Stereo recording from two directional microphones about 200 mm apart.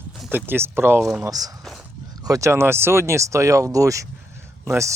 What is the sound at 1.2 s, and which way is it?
Speech, 20° right (ahead or behind).